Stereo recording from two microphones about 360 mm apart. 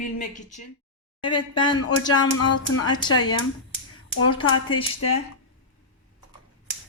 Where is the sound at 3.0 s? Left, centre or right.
Centre.